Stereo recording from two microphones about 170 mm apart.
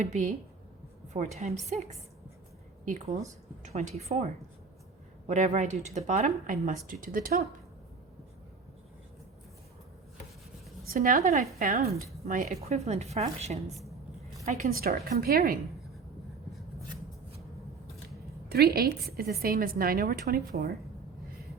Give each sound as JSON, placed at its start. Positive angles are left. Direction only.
{"t": 0.0, "sound": "speech", "side_deg": -45}
{"t": 10.8, "sound": "a woman's voice", "side_deg": -55}
{"t": 13.7, "sound": "a woman's voice", "side_deg": 0}
{"t": 14.7, "sound": "a woman's voice", "side_deg": -60}
{"t": 18.4, "sound": "a woman's voice", "side_deg": -70}